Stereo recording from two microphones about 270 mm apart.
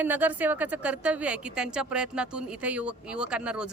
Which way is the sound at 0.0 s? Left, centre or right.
Centre.